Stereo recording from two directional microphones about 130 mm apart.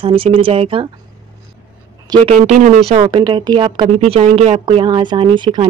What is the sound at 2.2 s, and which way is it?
Speech, 55° right (ahead or behind).